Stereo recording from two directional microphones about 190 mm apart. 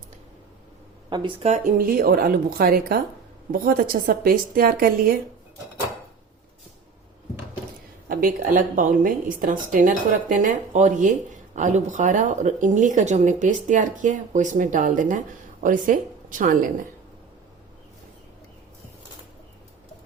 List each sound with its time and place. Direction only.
1.1 s a woman's voice: 30° right (ahead or behind); by 5.1 s 50° right (ahead or behind)
8.0 s a woman's voice: 50° right (ahead or behind)